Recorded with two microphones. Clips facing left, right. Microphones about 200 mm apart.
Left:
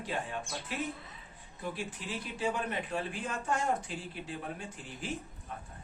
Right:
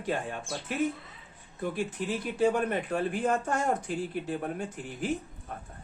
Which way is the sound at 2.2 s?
50° right (ahead or behind).